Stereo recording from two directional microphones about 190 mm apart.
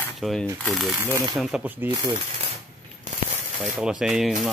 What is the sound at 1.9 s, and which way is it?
Speech, 25° right (ahead or behind).